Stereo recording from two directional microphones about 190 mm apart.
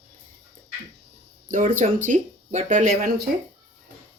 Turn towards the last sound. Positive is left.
turn(degrees=-45)  # may be behind; listen again after turning